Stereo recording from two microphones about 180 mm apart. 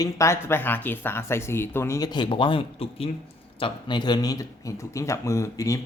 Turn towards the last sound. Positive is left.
turn(degrees=15)  # may be behind; listen again after turning